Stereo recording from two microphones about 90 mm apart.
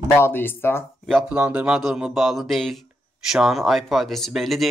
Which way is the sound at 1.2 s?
15° right (ahead or behind).